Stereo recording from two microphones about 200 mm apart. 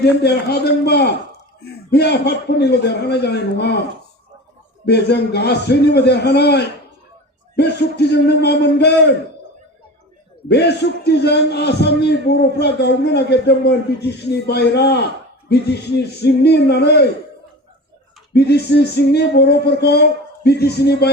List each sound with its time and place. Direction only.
0.0 s a man's voice: 55° left (ahead or behind)
4.9 s a man's voice: 55° left (ahead or behind)
10.5 s a man's voice: 55° left (ahead or behind)
18.3 s a man's voice: 55° left (ahead or behind)